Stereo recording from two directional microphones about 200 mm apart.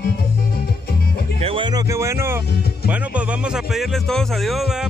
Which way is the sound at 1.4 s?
25° right (ahead or behind).